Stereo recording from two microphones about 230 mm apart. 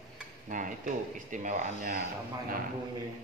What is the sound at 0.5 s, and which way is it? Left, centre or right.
Speech, right.